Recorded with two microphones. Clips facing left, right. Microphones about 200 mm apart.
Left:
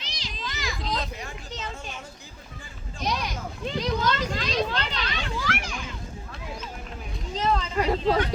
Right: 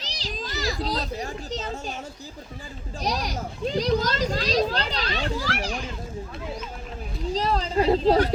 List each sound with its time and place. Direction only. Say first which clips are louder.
0.0 s a child's voice: right 4 dB; 40° right (ahead or behind)
3.0 s a child's voice: right 2 dB; 40° right (ahead or behind)
7.3 s a sound: right 2 dB; 35° right (ahead or behind)